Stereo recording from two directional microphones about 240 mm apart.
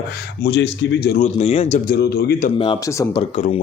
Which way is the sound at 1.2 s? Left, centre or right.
Left.